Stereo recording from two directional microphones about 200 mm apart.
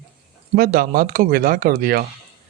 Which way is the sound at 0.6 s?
45° right (ahead or behind).